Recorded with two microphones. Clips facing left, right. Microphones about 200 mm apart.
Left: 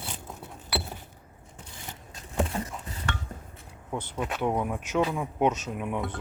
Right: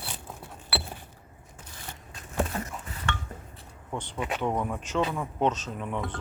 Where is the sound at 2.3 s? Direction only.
25° left (ahead or behind).